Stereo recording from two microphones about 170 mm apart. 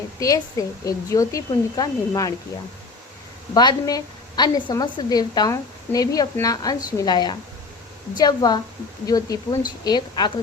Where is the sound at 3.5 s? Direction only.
25° left (ahead or behind).